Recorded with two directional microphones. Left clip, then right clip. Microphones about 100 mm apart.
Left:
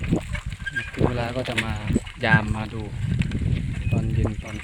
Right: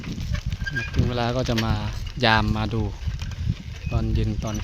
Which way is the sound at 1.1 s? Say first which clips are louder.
Right 3 dB; 10° right (ahead or behind).